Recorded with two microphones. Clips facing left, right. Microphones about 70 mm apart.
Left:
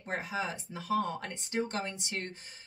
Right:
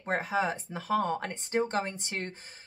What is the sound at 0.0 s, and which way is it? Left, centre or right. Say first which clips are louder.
Speech: right 6 dB; right.